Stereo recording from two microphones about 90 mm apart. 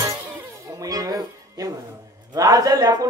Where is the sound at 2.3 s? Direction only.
40° right (ahead or behind).